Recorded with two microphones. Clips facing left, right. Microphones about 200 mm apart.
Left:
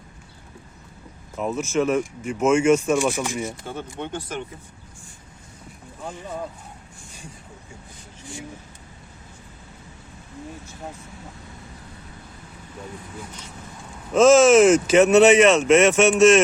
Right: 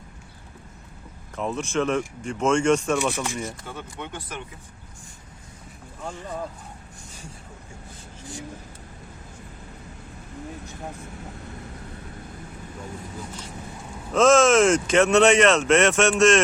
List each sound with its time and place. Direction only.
1.4 s speech: 5° left (ahead or behind)
3.7 s speech: 30° left (ahead or behind)
6.0 s speech: 5° left (ahead or behind)
14.1 s speech: 5° left (ahead or behind)